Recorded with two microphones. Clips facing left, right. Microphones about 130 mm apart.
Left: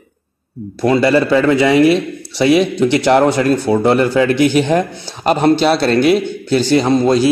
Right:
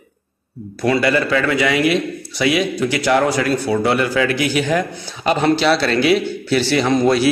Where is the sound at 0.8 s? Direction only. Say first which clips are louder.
Left 4 dB; 30° left (ahead or behind).